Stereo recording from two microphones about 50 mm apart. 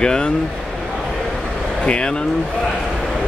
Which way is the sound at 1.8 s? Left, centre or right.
Left.